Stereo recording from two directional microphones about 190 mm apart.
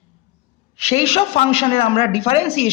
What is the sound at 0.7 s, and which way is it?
A man's voice, 35° left (ahead or behind).